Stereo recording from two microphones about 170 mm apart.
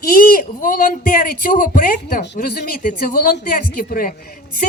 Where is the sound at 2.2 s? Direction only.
75° left (ahead or behind).